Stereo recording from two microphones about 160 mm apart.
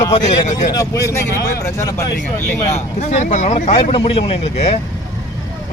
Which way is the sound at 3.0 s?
50° left (ahead or behind).